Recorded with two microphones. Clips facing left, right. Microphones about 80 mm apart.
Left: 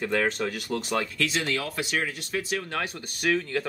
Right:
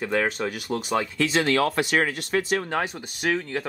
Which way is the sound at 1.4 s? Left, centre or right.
Right.